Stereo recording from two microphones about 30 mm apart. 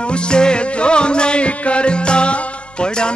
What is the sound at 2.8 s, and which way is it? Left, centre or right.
Music, left.